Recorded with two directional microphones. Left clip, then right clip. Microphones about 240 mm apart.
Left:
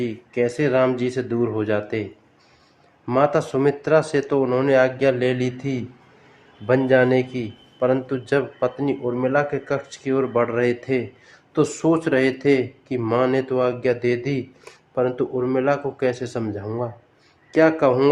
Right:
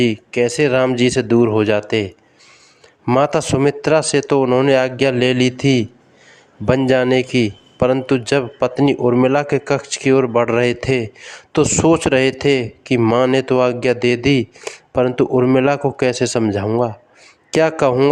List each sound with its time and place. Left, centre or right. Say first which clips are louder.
0.0 s speech: right 6 dB; right
3.1 s speech: right 4 dB; right